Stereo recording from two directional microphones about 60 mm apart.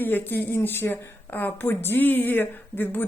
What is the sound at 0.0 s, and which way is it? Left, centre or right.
A woman's voice, left.